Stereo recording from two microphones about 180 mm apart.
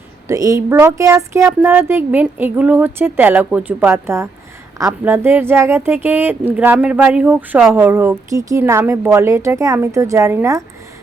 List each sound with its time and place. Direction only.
0.3 s speech: 20° right (ahead or behind)